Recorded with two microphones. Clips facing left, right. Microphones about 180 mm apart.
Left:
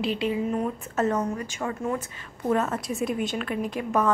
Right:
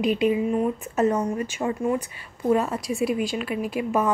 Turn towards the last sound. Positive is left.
turn(degrees=-10)  # may be behind; listen again after turning